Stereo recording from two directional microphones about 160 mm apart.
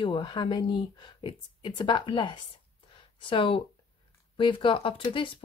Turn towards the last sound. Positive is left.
turn(degrees=30)  # may be behind; listen again after turning